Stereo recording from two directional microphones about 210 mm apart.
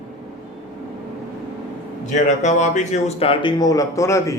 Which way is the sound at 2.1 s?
35° left (ahead or behind).